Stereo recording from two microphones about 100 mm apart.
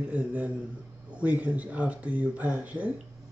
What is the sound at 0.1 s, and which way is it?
Speech, 15° right (ahead or behind).